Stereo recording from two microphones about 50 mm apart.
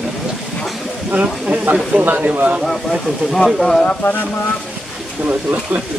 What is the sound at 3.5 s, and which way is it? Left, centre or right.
Speech, centre.